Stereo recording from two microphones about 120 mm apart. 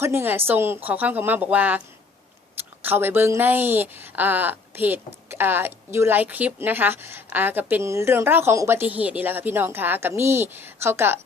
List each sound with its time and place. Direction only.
0.0 s a woman's voice: 20° right (ahead or behind)
2.8 s a woman's voice: 15° right (ahead or behind)